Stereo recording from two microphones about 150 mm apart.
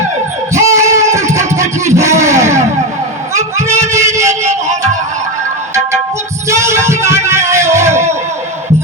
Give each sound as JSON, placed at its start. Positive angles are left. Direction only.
{"t": 0.5, "sound": "music", "side_deg": -20}
{"t": 3.3, "sound": "a sound", "side_deg": -20}
{"t": 4.3, "sound": "music", "side_deg": -50}
{"t": 6.5, "sound": "music", "side_deg": -20}